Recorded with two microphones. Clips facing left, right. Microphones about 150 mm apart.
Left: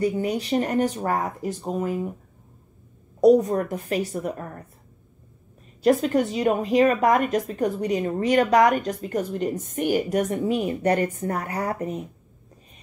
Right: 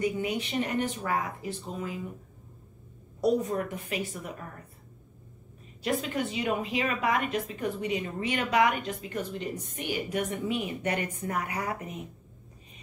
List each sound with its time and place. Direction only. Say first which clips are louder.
0.0 s a woman's voice: left 5 dB; 35° left (ahead or behind)
3.2 s a woman's voice: left 10 dB; 40° left (ahead or behind)
5.9 s a woman's voice: left 10 dB; 40° left (ahead or behind)